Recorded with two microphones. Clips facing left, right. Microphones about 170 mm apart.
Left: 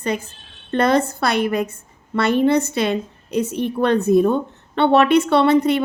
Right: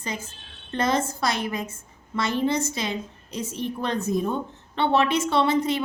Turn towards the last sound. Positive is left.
turn(degrees=65)  # may be behind; listen again after turning